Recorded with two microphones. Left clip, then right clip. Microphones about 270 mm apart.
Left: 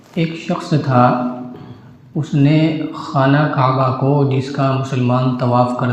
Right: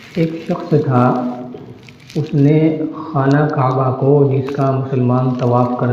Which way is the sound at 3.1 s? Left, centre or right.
Left.